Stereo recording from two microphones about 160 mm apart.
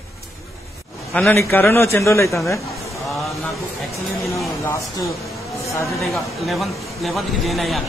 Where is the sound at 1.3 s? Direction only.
15° left (ahead or behind).